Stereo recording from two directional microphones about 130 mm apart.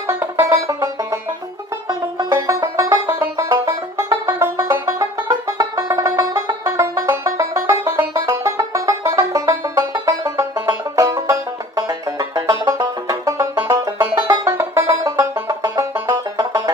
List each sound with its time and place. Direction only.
0.0 s music: 20° right (ahead or behind)
1.9 s banjo: 25° right (ahead or behind)
11.0 s music: 25° right (ahead or behind)